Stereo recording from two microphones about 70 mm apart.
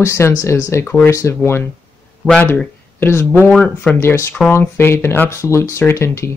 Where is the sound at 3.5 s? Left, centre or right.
Centre.